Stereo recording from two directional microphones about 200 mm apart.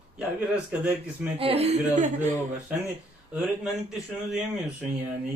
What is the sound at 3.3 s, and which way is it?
A man's voice, 5° right (ahead or behind).